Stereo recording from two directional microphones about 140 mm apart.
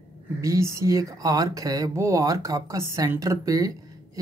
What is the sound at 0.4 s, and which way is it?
Speech, 20° right (ahead or behind).